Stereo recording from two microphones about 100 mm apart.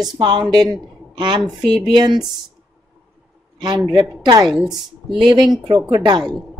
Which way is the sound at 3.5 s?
45° right (ahead or behind).